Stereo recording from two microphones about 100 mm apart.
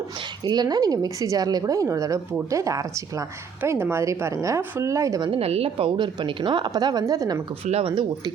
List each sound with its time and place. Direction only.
0.4 s a woman's voice: 45° right (ahead or behind)
3.6 s a woman's voice: 25° right (ahead or behind)
5.4 s a woman's voice: 90° right; by 7.4 s 35° right (ahead or behind)
7.6 s speech: 90° right